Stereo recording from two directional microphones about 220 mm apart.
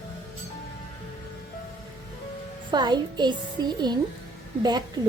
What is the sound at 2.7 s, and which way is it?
A woman's voice, 20° right (ahead or behind).